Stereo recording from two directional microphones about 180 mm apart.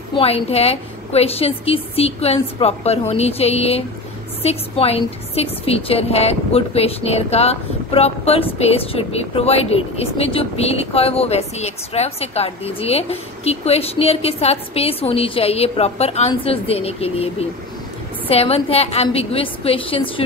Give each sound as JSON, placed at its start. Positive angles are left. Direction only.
{"t": 0.1, "sound": "a woman's voice", "side_deg": 35}